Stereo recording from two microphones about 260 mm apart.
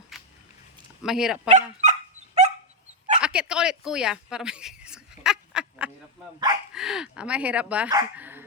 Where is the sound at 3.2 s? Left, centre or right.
Centre.